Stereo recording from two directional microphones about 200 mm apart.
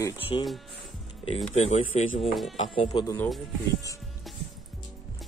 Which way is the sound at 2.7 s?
25° left (ahead or behind).